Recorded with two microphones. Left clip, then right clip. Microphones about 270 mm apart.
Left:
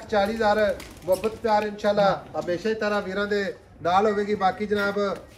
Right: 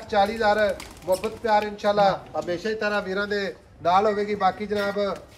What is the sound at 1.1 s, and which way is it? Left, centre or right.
Speech, right.